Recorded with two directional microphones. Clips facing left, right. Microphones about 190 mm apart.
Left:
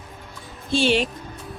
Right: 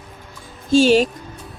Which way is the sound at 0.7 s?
40° right (ahead or behind).